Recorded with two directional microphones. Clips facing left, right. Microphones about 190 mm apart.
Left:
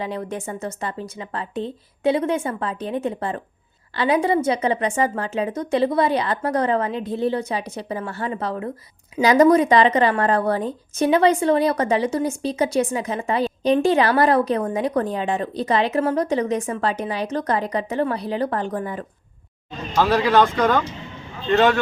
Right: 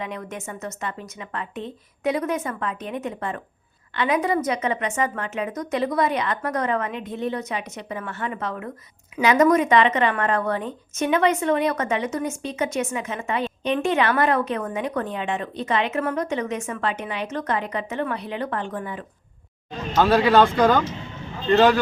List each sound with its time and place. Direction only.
0.0 s speech: 30° left (ahead or behind)
19.9 s speech: centre (ahead or behind)